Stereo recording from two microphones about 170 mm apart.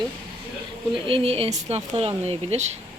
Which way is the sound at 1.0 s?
35° right (ahead or behind).